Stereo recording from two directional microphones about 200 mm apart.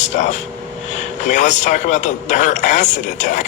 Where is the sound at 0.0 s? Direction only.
35° left (ahead or behind).